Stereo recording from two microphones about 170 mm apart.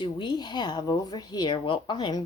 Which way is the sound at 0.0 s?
25° left (ahead or behind).